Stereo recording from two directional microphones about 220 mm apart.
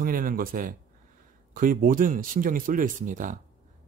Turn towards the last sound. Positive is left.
turn(degrees=-35)  # may be behind; listen again after turning